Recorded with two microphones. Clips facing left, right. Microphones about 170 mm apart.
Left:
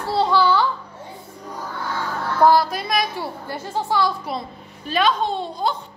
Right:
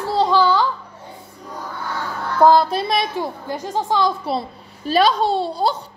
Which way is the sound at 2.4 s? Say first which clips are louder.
Right 3 dB; 25° right (ahead or behind).